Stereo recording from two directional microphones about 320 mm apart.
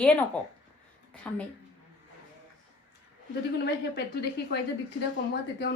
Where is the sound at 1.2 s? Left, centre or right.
Centre.